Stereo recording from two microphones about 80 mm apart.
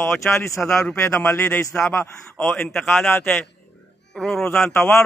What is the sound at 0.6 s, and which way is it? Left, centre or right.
Speech, centre.